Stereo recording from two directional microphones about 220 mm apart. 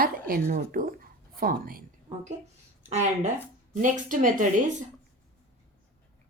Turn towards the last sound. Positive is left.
turn(degrees=-35)  # may be behind; listen again after turning